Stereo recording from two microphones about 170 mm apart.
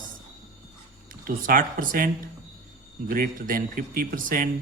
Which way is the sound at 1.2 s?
55° right (ahead or behind).